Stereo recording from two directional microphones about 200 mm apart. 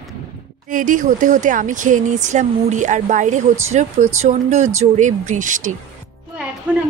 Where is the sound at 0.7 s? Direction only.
40° right (ahead or behind).